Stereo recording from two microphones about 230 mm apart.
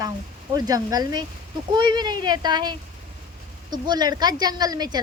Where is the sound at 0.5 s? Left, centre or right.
Centre.